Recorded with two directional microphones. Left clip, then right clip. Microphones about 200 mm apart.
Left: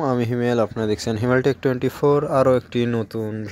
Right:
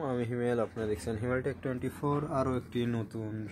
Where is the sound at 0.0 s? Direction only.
40° left (ahead or behind).